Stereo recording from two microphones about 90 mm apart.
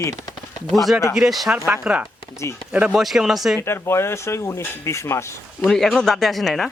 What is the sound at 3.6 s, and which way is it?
Speech, 30° left (ahead or behind).